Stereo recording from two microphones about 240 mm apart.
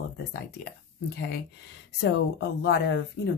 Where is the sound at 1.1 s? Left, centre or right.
Left.